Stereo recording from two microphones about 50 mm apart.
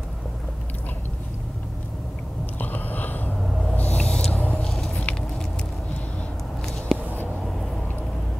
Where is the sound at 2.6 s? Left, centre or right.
Left.